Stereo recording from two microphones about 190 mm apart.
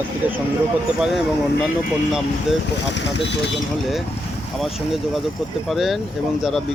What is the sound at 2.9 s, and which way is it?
Speech, 70° left (ahead or behind).